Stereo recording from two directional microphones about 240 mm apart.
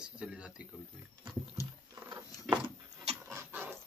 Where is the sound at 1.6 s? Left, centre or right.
Centre.